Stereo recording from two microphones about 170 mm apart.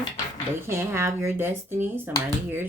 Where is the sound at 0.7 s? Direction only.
15° right (ahead or behind).